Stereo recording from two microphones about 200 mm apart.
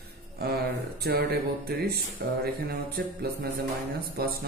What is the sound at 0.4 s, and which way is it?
A man's voice, 50° right (ahead or behind).